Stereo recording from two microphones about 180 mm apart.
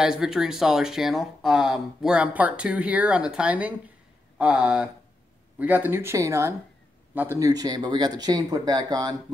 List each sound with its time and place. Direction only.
0.0 s speech: 5° right (ahead or behind); by 9.1 s 20° right (ahead or behind)